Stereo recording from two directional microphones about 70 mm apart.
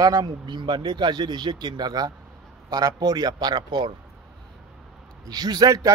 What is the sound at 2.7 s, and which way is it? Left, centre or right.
Speech, right.